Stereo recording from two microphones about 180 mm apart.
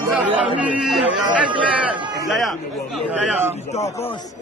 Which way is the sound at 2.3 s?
Centre (ahead or behind).